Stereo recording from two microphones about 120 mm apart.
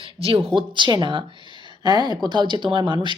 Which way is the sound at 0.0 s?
50° right (ahead or behind).